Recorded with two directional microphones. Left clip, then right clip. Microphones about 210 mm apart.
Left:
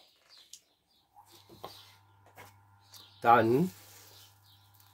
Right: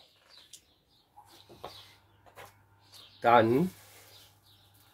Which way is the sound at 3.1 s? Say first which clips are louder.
Right 1 dB; 35° left (ahead or behind).